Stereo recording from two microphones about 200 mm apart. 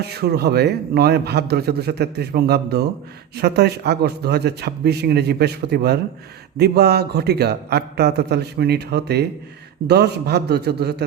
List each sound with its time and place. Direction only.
0.0 s a man's voice: 55° right (ahead or behind)